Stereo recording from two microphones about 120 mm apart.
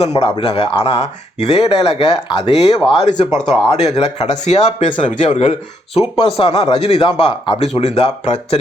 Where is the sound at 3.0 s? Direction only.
80° left.